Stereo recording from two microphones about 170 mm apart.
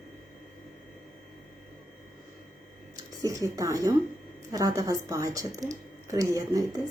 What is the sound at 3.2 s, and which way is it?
Speech, 20° right (ahead or behind).